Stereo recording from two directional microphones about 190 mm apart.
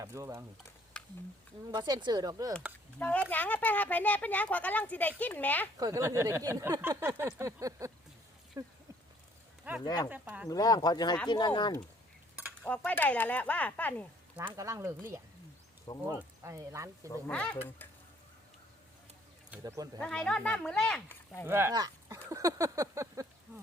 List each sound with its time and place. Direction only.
0.0 s speech: 15° right (ahead or behind)
0.9 s a sound: 5° left (ahead or behind)
1.7 s speech: 25° right (ahead or behind)
3.0 s speech: 10° left (ahead or behind)
5.8 s speech: 15° right (ahead or behind)
9.8 s speech: 20° left (ahead or behind)
10.1 s speech: 10° right (ahead or behind)
10.5 s speech: 20° left (ahead or behind)
12.5 s speech: 5° left (ahead or behind)
14.3 s speech: 15° right (ahead or behind)
17.1 s speech: 10° left (ahead or behind)
19.6 s speech: 20° right (ahead or behind)
20.0 s speech: 5° left (ahead or behind)
21.4 s speech: 10° right (ahead or behind)